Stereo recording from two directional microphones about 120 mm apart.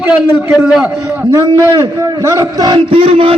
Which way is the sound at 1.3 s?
25° right (ahead or behind).